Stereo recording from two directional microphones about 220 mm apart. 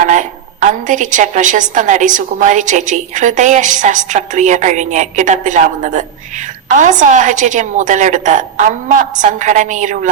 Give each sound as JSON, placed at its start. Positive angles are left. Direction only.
{"t": 0.1, "sound": "a woman's voice", "side_deg": -35}